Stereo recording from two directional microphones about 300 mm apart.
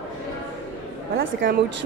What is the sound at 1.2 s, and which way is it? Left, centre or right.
Speech, right.